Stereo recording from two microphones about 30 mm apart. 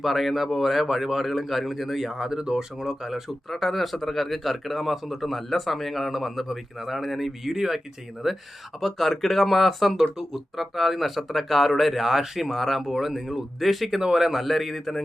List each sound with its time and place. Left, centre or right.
0.0 s speech: centre
2.1 s speech: centre
3.5 s speech: centre
14.4 s speech: centre